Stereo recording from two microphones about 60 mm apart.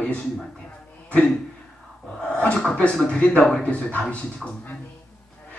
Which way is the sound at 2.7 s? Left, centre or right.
Centre.